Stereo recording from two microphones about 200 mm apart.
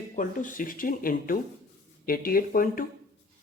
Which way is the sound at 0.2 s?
40° left (ahead or behind).